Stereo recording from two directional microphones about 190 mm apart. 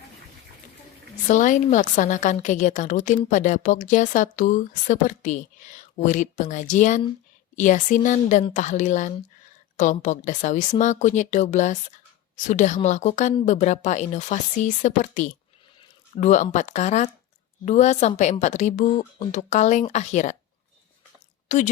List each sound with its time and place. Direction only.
1.3 s a woman's voice: 40° left (ahead or behind)
21.4 s speech: 40° left (ahead or behind)